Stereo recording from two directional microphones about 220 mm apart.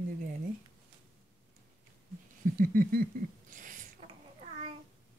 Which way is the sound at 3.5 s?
35° right (ahead or behind).